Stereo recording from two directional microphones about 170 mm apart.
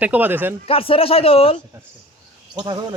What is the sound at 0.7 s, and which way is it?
Speech, 35° left (ahead or behind).